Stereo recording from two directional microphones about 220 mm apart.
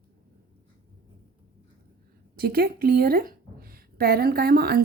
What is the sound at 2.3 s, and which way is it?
Speech, 45° right (ahead or behind).